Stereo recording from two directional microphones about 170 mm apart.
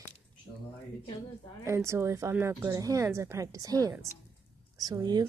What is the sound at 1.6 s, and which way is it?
A woman's voice, 15° right (ahead or behind).